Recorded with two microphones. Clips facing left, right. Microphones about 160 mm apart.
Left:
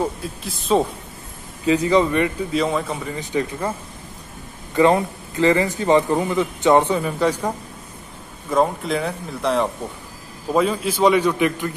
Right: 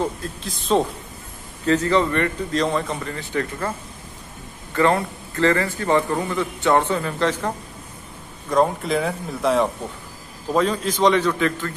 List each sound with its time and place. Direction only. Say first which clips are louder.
0.0 s a man's voice: left 1 dB; 5° left (ahead or behind)
4.7 s a man's voice: left 3 dB; 15° left (ahead or behind)